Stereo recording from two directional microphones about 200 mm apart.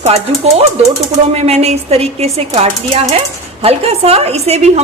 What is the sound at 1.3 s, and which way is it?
Speech, 30° right (ahead or behind).